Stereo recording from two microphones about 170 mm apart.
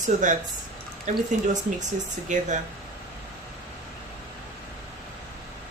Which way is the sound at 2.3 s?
45° right (ahead or behind).